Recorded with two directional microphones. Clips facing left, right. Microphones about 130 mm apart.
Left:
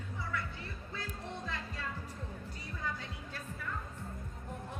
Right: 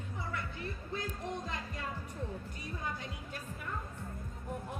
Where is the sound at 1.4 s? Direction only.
15° right (ahead or behind).